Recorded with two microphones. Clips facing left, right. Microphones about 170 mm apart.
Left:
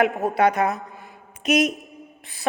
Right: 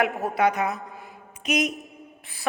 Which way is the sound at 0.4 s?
50° left (ahead or behind).